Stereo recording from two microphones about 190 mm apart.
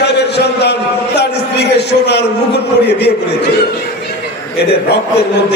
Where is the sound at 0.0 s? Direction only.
60° left (ahead or behind).